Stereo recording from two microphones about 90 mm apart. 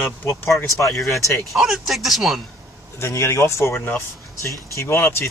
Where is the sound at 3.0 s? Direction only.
30° left (ahead or behind).